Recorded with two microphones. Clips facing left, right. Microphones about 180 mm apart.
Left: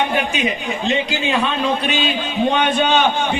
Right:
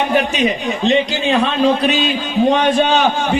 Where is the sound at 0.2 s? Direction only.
40° right (ahead or behind).